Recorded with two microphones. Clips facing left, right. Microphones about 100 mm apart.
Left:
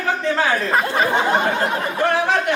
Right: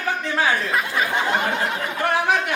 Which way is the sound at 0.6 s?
40° left (ahead or behind).